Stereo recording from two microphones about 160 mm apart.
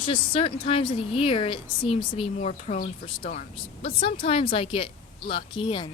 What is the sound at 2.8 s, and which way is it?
Speech, 60° left (ahead or behind).